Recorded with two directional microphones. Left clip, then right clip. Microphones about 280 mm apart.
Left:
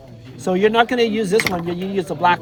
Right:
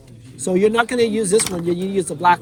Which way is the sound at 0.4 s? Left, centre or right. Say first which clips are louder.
Left 1 dB; centre.